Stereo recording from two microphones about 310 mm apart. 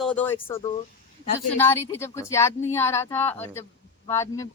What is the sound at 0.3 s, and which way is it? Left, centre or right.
A woman's voice, centre.